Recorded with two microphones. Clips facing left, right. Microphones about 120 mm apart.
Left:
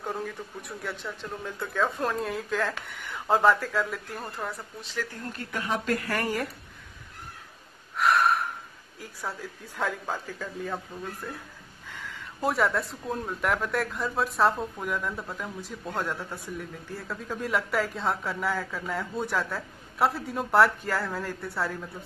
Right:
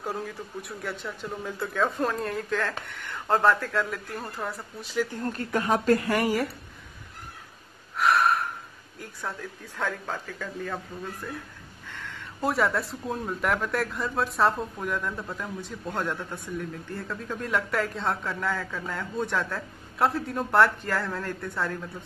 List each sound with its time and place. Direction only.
0.0 s speech: centre (ahead or behind)
5.5 s speech: 40° right (ahead or behind)
6.1 s speech: 5° right (ahead or behind)
8.0 s gasp: centre (ahead or behind)
9.0 s speech: 5° left (ahead or behind)